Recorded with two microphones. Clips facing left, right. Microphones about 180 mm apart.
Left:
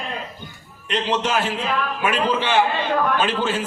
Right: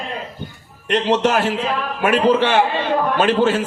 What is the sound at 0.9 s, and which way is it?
Speech, 65° right (ahead or behind).